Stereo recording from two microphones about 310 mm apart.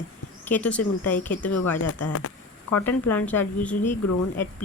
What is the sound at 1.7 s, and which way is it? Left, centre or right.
Speech, left.